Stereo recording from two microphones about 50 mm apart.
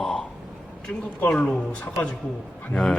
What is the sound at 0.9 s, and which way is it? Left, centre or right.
Speech, left.